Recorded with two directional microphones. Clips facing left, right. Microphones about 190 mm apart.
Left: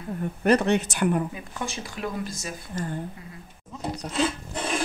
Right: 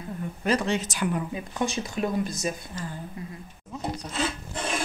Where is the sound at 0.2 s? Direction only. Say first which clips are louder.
Left 5 dB; 60° left (ahead or behind).